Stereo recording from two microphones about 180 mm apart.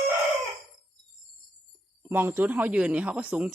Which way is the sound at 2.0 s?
10° right (ahead or behind).